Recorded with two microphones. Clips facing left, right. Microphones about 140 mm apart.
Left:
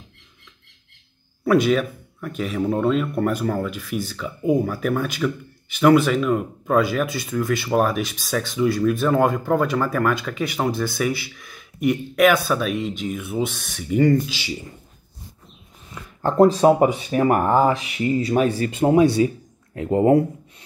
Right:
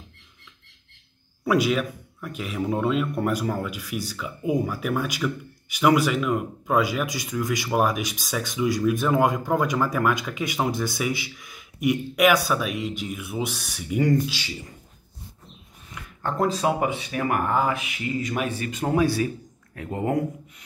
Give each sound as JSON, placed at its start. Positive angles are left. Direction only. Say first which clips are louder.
{"t": 1.4, "sound": "speech", "louder": "left 4 dB", "side_deg": -10}
{"t": 15.9, "sound": "speech", "louder": "left 6 dB", "side_deg": 35}